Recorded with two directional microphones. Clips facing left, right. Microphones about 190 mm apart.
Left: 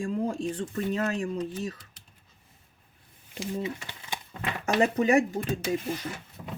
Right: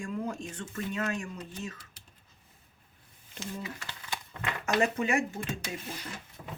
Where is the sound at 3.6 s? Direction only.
25° left (ahead or behind).